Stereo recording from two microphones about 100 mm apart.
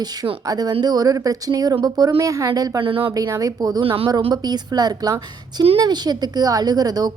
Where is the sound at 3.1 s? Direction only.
35° right (ahead or behind).